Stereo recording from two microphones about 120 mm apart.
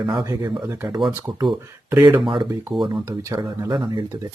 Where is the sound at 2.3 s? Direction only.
40° right (ahead or behind).